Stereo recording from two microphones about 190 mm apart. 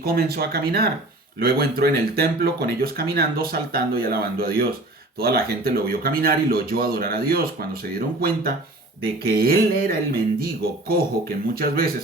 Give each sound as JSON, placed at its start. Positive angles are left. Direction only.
{"t": 0.0, "sound": "speech", "side_deg": -55}